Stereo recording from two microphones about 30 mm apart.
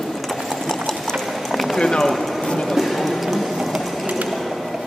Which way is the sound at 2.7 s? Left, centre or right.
Centre.